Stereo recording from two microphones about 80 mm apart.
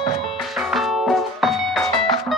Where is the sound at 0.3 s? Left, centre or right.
Centre.